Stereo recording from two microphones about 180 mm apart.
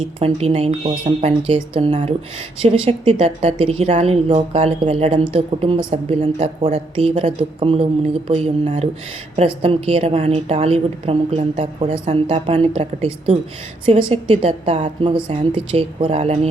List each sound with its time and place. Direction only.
0.0 s speech: 35° right (ahead or behind)